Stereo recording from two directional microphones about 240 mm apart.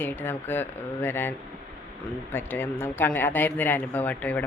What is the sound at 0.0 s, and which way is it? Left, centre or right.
Speech, centre.